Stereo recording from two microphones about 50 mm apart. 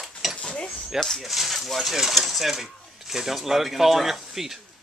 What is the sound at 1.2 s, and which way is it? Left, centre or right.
Speech, centre.